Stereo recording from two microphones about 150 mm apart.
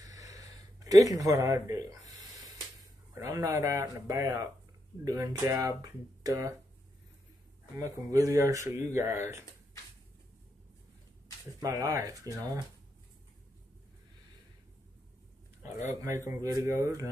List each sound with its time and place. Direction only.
0.0 s a sound: 25° right (ahead or behind)
3.2 s speech: 20° right (ahead or behind)
7.7 s speech: 20° right (ahead or behind)
11.6 s speech: 20° right (ahead or behind)
15.9 s speech: 20° right (ahead or behind)